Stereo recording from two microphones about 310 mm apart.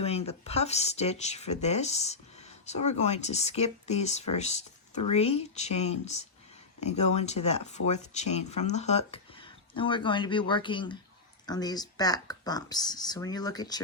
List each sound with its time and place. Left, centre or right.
0.0 s speech: centre